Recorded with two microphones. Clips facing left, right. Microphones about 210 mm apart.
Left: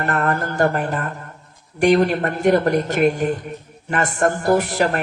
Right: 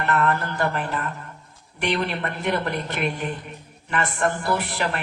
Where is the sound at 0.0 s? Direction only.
45° left (ahead or behind).